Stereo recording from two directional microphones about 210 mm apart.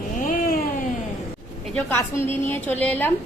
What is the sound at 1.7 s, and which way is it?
A woman's voice, 10° left (ahead or behind).